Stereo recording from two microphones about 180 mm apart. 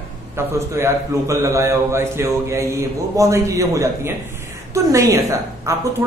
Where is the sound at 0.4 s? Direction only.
15° right (ahead or behind).